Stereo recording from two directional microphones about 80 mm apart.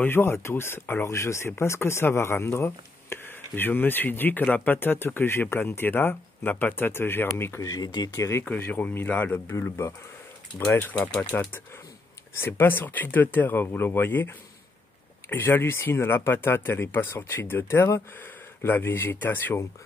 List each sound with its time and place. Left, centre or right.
0.0 s speech: left
7.6 s speech: left
8.2 s speech: left
8.5 s speech: left
10.7 s speech: left